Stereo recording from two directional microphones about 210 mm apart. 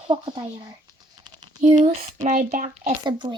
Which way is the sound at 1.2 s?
20° right (ahead or behind).